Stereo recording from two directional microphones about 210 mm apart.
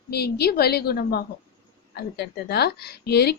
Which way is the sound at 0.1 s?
50° left (ahead or behind).